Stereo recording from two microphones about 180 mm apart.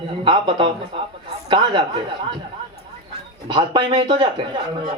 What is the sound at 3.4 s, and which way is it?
A man's voice, 25° right (ahead or behind).